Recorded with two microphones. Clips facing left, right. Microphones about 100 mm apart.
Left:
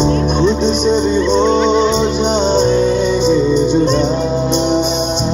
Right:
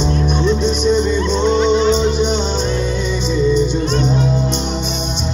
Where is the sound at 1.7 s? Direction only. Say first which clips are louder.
Left 1 dB; 65° left (ahead or behind).